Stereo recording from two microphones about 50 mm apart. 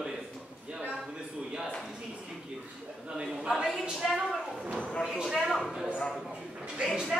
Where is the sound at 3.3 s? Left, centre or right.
Centre.